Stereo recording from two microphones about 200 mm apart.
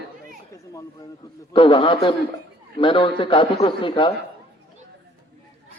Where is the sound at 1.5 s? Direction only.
25° left (ahead or behind).